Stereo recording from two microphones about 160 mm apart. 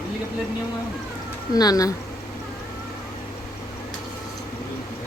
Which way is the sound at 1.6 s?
25° left (ahead or behind).